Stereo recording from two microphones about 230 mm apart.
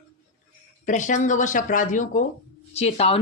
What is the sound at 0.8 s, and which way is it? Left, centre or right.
Speech, left.